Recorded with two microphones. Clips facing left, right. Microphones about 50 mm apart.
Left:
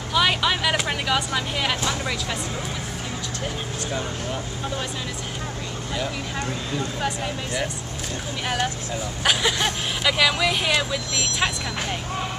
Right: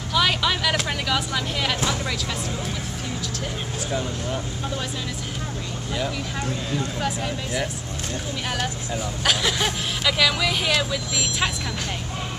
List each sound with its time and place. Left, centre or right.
0.1 s a sound: centre
3.9 s speech: centre
5.9 s speech: centre
9.2 s speech: centre